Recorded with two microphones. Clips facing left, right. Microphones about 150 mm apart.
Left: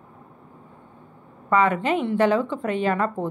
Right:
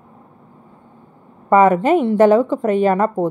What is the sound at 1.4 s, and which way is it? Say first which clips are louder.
A woman's voice: right 8 dB; 45° right (ahead or behind).